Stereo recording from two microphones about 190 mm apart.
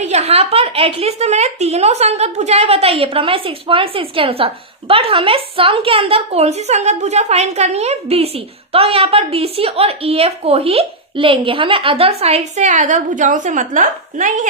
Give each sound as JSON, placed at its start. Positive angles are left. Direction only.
{"t": 0.0, "sound": "a woman's voice", "side_deg": -35}